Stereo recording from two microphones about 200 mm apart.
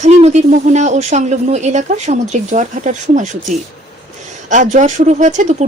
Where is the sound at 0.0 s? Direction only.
35° right (ahead or behind).